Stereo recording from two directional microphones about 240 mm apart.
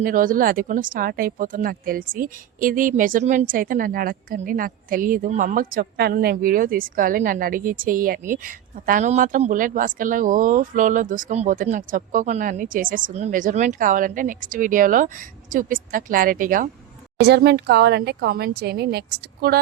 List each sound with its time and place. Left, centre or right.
0.0 s speech: right